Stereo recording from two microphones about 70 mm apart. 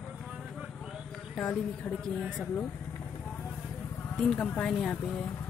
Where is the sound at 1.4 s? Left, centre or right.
Left.